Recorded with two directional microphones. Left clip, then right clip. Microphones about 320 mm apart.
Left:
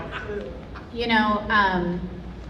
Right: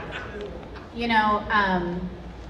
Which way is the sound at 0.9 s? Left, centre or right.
Left.